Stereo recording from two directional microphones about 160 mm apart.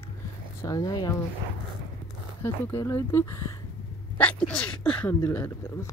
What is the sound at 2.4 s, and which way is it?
Speech, 15° left (ahead or behind).